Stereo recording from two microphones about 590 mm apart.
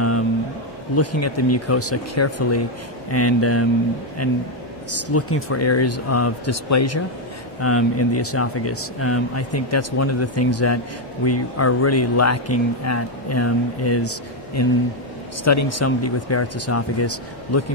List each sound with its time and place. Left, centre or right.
0.9 s speech: left